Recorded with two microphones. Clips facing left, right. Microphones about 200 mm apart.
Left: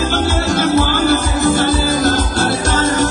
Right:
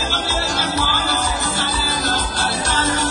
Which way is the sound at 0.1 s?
50° left (ahead or behind).